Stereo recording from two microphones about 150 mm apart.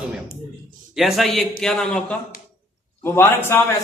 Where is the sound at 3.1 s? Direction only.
15° left (ahead or behind).